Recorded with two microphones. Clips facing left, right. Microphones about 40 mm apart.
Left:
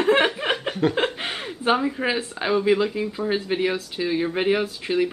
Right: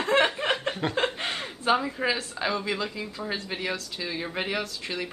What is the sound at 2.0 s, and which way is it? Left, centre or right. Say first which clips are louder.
Speech: left 4 dB; left.